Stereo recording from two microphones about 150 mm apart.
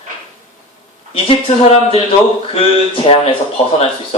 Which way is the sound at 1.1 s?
40° left (ahead or behind).